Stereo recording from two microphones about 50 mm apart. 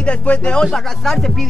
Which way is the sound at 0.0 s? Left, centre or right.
Left.